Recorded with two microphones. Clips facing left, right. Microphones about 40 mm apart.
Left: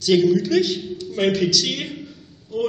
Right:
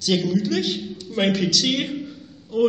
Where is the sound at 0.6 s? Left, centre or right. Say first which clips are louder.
Left 5 dB; right.